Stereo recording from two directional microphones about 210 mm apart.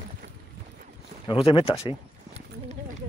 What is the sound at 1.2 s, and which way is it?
Speech, 25° left (ahead or behind).